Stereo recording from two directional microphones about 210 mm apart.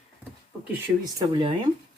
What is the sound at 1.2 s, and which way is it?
Speech, 20° right (ahead or behind).